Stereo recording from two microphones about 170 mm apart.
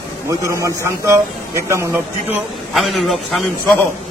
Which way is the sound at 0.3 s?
20° right (ahead or behind).